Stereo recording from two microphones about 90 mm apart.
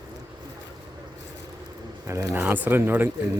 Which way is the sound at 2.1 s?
35° right (ahead or behind).